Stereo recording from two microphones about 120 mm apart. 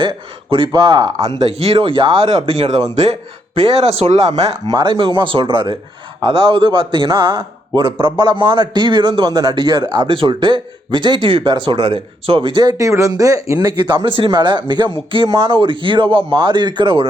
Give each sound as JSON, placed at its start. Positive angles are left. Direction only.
{"t": 0.0, "sound": "a man's voice", "side_deg": -45}
{"t": 1.4, "sound": "speech", "side_deg": -60}
{"t": 3.0, "sound": "speech", "side_deg": -65}
{"t": 3.6, "sound": "speech", "side_deg": -55}
{"t": 4.7, "sound": "a man's voice", "side_deg": -40}
{"t": 12.6, "sound": "speech", "side_deg": -25}
{"t": 13.9, "sound": "a man's voice", "side_deg": -40}